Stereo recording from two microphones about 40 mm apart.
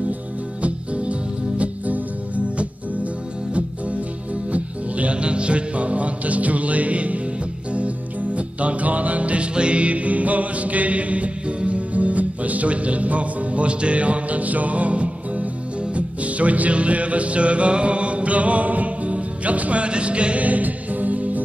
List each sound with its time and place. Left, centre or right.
0.6 s music: right
4.5 s music: right
8.4 s music: right